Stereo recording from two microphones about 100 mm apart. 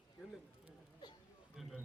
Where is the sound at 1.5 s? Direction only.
5° right (ahead or behind).